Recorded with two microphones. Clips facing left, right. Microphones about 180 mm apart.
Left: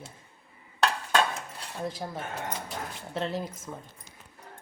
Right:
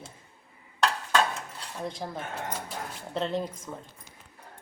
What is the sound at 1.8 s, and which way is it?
A woman's voice, 5° left (ahead or behind).